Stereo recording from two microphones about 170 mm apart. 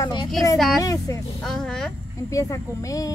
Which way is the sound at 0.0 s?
25° left (ahead or behind).